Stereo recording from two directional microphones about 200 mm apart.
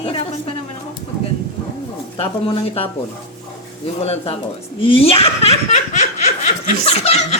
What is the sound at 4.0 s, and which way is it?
Chuckle, 30° left (ahead or behind).